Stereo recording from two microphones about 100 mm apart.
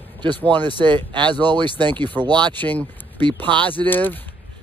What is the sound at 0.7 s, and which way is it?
Speech, 50° right (ahead or behind).